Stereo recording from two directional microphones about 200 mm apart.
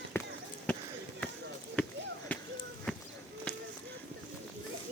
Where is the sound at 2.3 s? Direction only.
10° left (ahead or behind).